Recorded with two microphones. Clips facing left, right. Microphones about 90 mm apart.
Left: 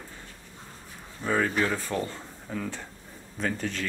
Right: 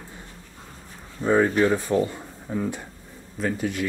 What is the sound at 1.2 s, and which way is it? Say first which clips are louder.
Speech: right 7 dB; 25° right (ahead or behind).